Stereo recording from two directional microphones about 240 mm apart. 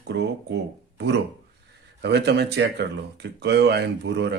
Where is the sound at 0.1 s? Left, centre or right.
Right.